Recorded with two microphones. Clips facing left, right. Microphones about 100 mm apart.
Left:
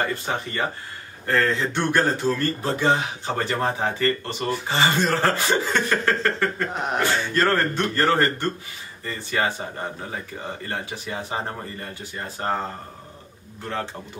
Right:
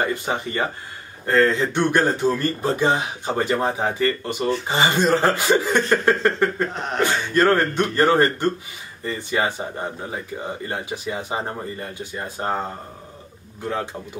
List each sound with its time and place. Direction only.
0.0 s speech: 15° right (ahead or behind)
6.7 s a sound: 10° left (ahead or behind)
7.0 s speech: 15° right (ahead or behind)